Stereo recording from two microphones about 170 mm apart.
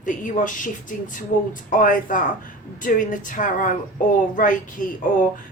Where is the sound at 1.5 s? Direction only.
50° left (ahead or behind).